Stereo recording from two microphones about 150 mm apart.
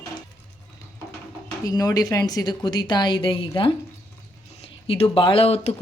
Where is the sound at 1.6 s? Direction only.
25° left (ahead or behind).